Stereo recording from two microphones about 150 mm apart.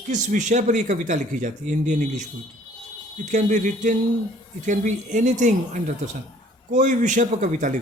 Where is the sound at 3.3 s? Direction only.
55° right (ahead or behind).